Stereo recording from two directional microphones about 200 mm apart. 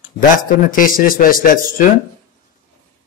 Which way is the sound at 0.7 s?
45° left (ahead or behind).